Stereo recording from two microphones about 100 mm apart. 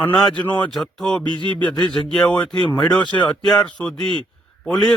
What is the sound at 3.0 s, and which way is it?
Speech, 50° left (ahead or behind).